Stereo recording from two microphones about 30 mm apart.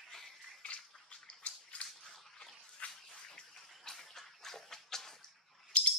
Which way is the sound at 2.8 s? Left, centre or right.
Left.